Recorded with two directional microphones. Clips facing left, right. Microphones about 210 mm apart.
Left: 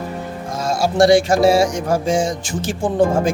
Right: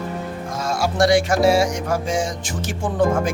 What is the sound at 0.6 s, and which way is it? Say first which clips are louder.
A man's voice: left 4 dB; 30° left (ahead or behind).